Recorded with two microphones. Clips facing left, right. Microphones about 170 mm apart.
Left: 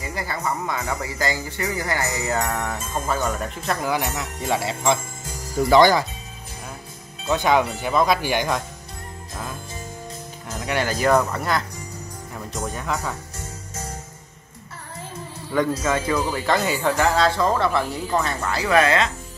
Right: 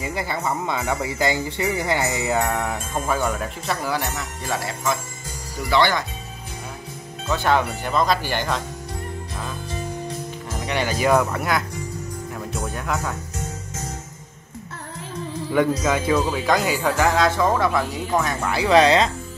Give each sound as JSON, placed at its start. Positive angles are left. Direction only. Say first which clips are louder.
{"t": 0.0, "sound": "speech", "louder": "right 2 dB", "side_deg": -20}
{"t": 3.8, "sound": "speech", "louder": "left 1 dB", "side_deg": 15}
{"t": 5.7, "sound": "speech", "louder": "left 5 dB", "side_deg": 40}
{"t": 7.2, "sound": "speech", "louder": "left 1 dB", "side_deg": 15}
{"t": 10.6, "sound": "speech", "louder": "even", "side_deg": 0}
{"t": 15.8, "sound": "speech", "louder": "right 2 dB", "side_deg": -10}